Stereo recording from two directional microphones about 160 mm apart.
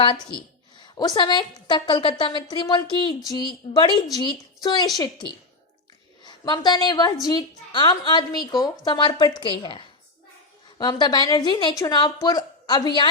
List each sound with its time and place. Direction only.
0.0 s a woman's voice: 30° left (ahead or behind)
6.2 s a woman's voice: 25° left (ahead or behind)